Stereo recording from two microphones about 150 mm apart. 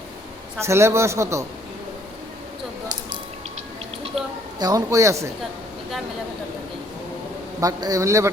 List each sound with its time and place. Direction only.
0.6 s a man's voice: 20° right (ahead or behind)
4.6 s a man's voice: 20° right (ahead or behind)
7.6 s a man's voice: 25° right (ahead or behind)